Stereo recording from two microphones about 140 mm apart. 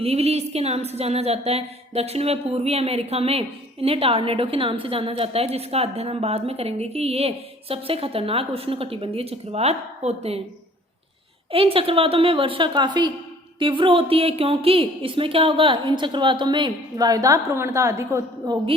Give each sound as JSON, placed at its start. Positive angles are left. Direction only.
{"t": 0.0, "sound": "speech", "side_deg": -45}
{"t": 11.5, "sound": "a woman's voice", "side_deg": -40}